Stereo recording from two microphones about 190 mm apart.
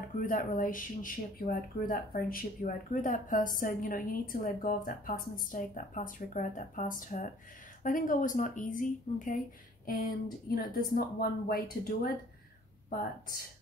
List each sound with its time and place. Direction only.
0.2 s speech: 45° left (ahead or behind)
10.5 s speech: 50° left (ahead or behind)